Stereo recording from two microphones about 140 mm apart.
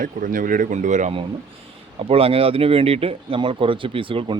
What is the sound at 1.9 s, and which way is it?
Speech, 40° right (ahead or behind).